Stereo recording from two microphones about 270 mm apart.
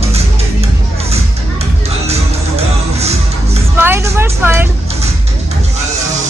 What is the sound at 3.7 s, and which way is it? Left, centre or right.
Music, centre.